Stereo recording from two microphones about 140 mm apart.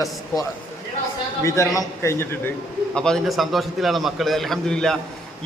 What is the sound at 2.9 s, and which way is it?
A man's voice, 5° left (ahead or behind).